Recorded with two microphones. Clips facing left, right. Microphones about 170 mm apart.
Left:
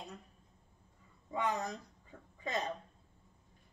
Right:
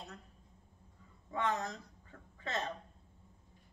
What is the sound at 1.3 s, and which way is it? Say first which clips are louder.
A woman's voice: even; 15° left (ahead or behind).